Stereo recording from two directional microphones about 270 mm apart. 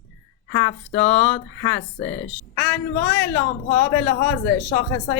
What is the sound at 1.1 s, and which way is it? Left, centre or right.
Speech, centre.